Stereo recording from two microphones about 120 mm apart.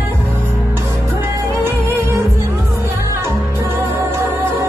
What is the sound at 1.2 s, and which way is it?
Music, 20° right (ahead or behind).